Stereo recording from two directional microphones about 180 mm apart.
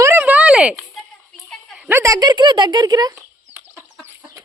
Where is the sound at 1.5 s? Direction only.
10° right (ahead or behind).